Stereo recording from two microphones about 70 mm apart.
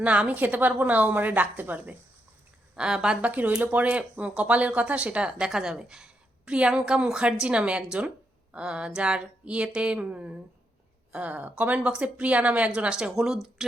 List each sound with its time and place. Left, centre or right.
0.0 s a woman's voice: centre
2.7 s a woman's voice: centre